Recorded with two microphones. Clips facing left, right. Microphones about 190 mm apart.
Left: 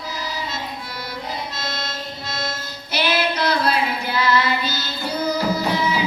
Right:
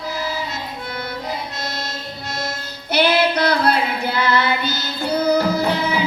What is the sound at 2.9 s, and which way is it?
Female singing, 60° right (ahead or behind).